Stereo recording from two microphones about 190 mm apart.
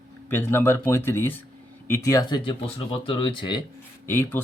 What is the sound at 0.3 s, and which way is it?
Speech, 10° left (ahead or behind).